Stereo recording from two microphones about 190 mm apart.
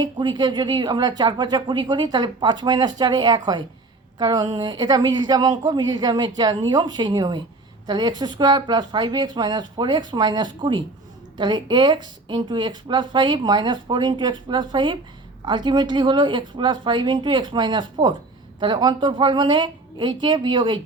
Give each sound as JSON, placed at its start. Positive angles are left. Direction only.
{"t": 0.0, "sound": "speech", "side_deg": -20}